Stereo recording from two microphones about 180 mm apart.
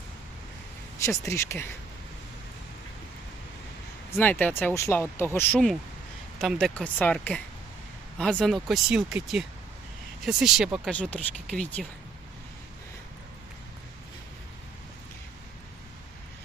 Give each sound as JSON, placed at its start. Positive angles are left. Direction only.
{"t": 1.3, "sound": "speech", "side_deg": 15}
{"t": 4.2, "sound": "speech", "side_deg": 10}